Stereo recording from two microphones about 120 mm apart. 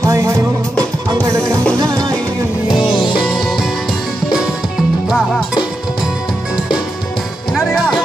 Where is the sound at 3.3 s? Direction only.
Centre (ahead or behind).